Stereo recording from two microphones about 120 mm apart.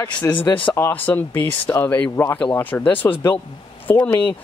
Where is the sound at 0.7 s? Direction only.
20° left (ahead or behind).